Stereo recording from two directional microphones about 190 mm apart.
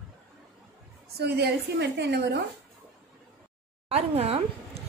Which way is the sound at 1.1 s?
60° right (ahead or behind).